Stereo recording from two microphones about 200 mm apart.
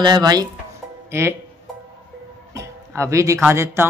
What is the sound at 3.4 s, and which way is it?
Speech, 10° right (ahead or behind).